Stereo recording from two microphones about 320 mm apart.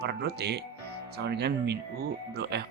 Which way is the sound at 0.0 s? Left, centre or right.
Right.